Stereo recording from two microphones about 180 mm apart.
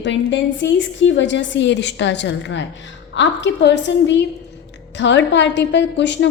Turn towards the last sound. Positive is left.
turn(degrees=75)  # may be behind; listen again after turning